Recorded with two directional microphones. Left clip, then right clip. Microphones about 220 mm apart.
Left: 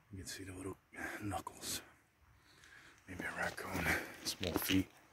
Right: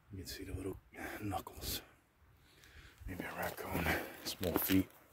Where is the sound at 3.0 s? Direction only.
5° right (ahead or behind).